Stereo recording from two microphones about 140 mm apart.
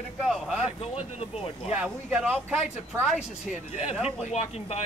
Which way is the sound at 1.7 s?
10° right (ahead or behind).